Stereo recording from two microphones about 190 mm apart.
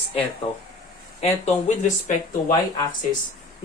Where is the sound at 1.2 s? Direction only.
35° left (ahead or behind).